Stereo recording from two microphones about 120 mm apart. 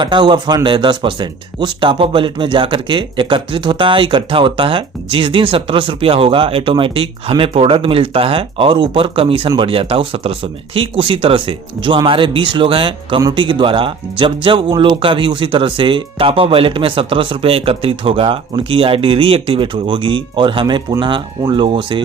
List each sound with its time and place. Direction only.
0.0 s speech: 40° right (ahead or behind)